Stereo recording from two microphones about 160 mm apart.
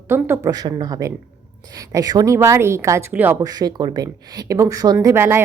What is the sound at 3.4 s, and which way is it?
A woman's voice, 25° right (ahead or behind).